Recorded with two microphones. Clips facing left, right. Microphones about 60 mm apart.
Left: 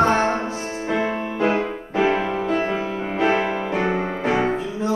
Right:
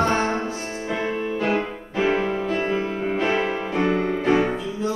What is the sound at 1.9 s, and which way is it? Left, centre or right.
Music, centre.